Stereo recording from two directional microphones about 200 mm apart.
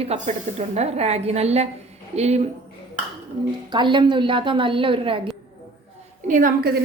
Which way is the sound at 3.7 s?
25° right (ahead or behind).